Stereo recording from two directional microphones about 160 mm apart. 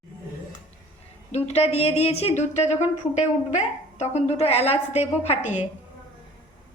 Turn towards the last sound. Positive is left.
turn(degrees=40)  # may be behind; listen again after turning